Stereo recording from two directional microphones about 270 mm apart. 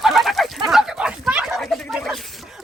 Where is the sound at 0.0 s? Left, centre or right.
Centre.